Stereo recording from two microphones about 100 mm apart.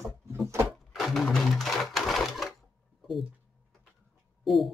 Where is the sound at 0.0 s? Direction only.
25° right (ahead or behind).